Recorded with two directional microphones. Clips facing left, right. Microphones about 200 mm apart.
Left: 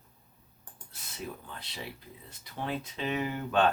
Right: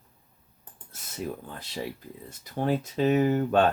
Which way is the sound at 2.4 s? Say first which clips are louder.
Right 8 dB; 45° right (ahead or behind).